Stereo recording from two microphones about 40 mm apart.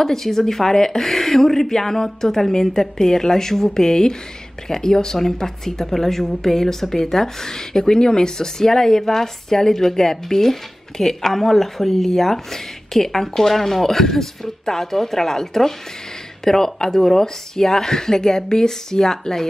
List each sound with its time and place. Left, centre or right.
0.0 s a woman's voice: centre